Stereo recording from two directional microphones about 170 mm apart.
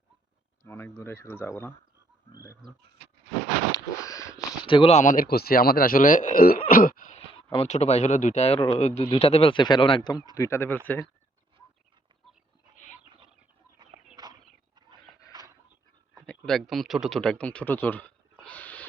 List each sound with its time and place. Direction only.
0.7 s speech: 10° left (ahead or behind)
4.0 s sniff: 20° left (ahead or behind)
4.6 s speech: 30° left (ahead or behind); by 6.6 s 60° left (ahead or behind)
6.7 s throat clearing: 55° left (ahead or behind)
7.3 s speech: 35° left (ahead or behind); by 11.1 s 10° left (ahead or behind)
14.2 s a sound: 25° right (ahead or behind)
16.2 s speech: 5° left (ahead or behind)
18.4 s a sound: 10° left (ahead or behind)